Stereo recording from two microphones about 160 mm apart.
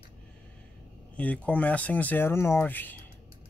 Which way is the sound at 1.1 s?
10° left (ahead or behind).